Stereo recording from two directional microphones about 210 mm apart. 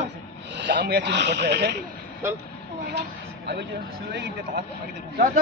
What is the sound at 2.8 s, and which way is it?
A man's voice, 50° right (ahead or behind).